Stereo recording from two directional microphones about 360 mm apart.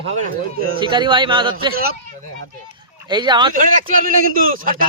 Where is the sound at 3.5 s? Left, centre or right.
Right.